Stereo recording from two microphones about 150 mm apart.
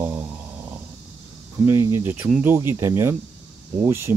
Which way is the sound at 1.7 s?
20° right (ahead or behind).